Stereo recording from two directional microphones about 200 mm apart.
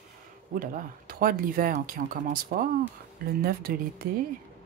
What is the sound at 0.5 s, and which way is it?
Speech, 45° right (ahead or behind).